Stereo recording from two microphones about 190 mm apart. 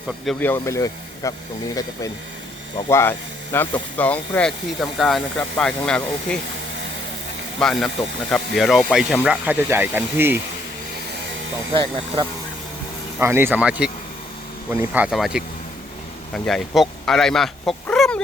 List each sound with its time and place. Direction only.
0.3 s speech: 10° left (ahead or behind)
2.9 s speech: 10° left (ahead or behind)
7.6 s speech: centre (ahead or behind)
11.7 s speech: 25° right (ahead or behind)
13.1 s speech: 10° right (ahead or behind); by 18.2 s 5° left (ahead or behind)